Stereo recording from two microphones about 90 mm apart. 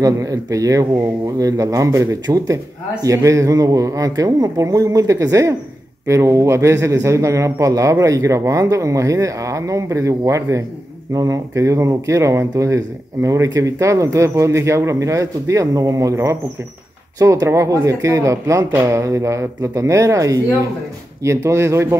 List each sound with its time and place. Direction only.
0.0 s speech: 40° right (ahead or behind)